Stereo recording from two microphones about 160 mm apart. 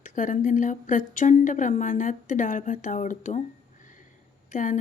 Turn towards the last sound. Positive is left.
turn(degrees=55)  # may be behind; listen again after turning